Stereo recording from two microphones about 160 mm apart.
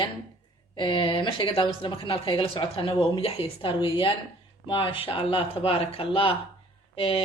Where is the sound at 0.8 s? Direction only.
30° left (ahead or behind).